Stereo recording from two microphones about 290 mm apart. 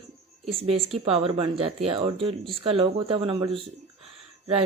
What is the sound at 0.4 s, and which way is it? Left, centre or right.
Speech, centre.